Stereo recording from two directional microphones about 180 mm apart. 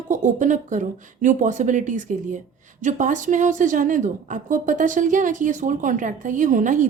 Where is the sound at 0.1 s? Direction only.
45° right (ahead or behind).